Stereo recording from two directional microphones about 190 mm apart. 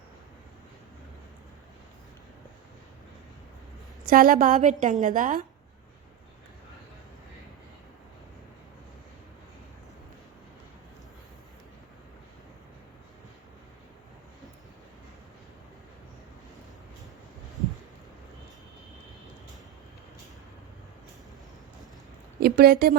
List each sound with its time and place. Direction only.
4.0 s a woman's voice: 50° right (ahead or behind)
22.4 s a woman's voice: 55° right (ahead or behind)